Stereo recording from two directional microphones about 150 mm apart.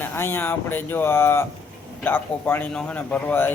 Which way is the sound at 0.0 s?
15° left (ahead or behind).